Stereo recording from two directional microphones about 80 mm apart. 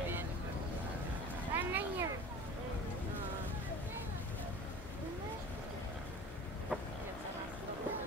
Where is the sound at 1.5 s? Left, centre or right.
Right.